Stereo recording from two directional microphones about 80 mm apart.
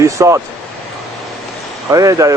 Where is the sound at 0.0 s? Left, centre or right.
Right.